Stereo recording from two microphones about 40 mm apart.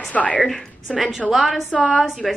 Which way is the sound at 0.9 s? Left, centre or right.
Centre.